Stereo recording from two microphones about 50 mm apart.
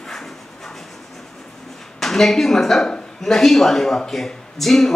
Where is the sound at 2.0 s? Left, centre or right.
Centre.